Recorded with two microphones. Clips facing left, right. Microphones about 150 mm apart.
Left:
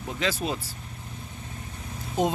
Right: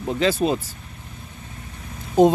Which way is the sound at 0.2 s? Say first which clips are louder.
Right 8 dB; 25° right (ahead or behind).